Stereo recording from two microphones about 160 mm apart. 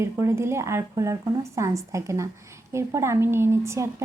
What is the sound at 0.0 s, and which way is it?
A woman's voice, 15° right (ahead or behind).